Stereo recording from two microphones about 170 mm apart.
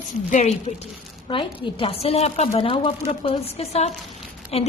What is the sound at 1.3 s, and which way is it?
A woman's voice, 30° left (ahead or behind).